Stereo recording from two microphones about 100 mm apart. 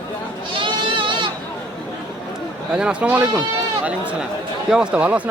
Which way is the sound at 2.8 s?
10° right (ahead or behind).